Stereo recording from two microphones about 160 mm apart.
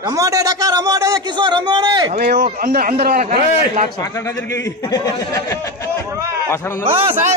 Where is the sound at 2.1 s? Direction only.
70° right (ahead or behind).